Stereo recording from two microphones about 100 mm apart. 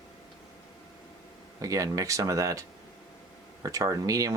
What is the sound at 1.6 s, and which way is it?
Speech, 35° right (ahead or behind).